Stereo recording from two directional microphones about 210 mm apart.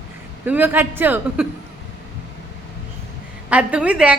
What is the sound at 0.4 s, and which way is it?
A woman's voice, 10° right (ahead or behind).